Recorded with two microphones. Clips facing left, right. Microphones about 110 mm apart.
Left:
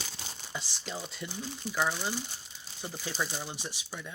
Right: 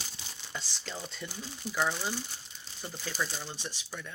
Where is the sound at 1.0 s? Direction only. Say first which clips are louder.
Left 2 dB; 5° left (ahead or behind).